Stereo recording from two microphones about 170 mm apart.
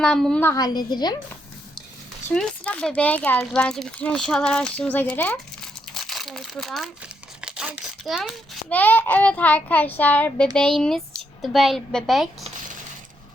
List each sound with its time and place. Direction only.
0.0 s speech: 5° left (ahead or behind)
0.5 s a woman's voice: 20° left (ahead or behind)
2.3 s speech: 5° left (ahead or behind)
7.4 s a sound: 5° right (ahead or behind)
8.7 s a child's voice: 10° left (ahead or behind)